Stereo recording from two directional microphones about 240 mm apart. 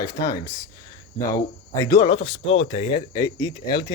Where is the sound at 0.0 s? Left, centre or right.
Centre.